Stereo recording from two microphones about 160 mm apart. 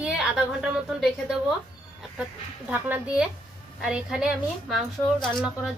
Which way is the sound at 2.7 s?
10° right (ahead or behind).